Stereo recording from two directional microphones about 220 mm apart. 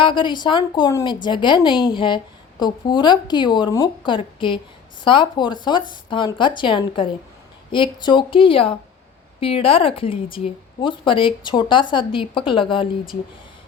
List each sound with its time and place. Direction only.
0.0 s a woman's voice: 20° left (ahead or behind)